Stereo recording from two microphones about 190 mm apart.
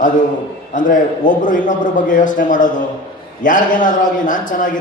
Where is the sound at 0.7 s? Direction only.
45° left (ahead or behind).